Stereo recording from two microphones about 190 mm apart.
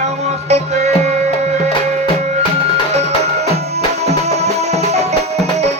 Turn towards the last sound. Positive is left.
turn(degrees=-35)  # may be behind; listen again after turning